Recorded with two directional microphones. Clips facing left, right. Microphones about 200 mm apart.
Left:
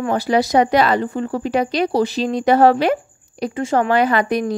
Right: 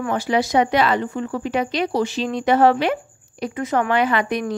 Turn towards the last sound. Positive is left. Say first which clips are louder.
# left 3 dB
turn(degrees=35)  # may be behind; listen again after turning